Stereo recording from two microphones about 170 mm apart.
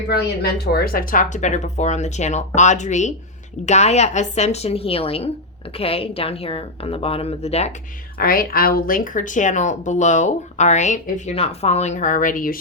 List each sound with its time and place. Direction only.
0.6 s a woman's voice: 65° left (ahead or behind); by 7.7 s 40° left (ahead or behind)
8.2 s speech: 60° left (ahead or behind)